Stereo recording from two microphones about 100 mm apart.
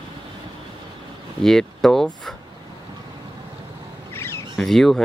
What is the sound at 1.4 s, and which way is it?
Speech, 5° left (ahead or behind).